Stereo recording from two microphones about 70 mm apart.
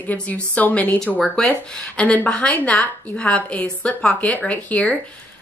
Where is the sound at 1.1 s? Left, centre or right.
Centre.